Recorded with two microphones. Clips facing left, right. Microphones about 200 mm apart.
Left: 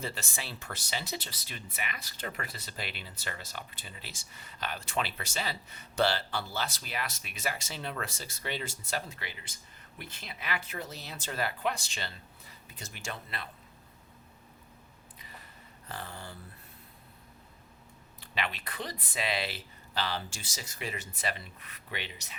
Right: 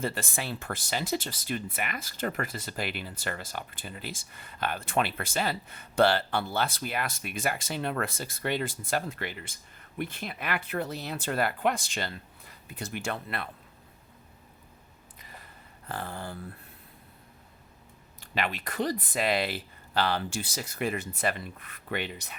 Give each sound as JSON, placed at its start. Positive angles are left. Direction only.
{"t": 0.0, "sound": "speech", "side_deg": -55}
{"t": 15.9, "sound": "speech", "side_deg": -55}
{"t": 18.2, "sound": "speech", "side_deg": -45}